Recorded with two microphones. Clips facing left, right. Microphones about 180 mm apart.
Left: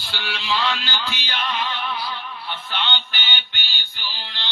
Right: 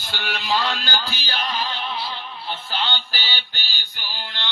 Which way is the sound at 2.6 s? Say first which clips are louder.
Even; 35° right (ahead or behind).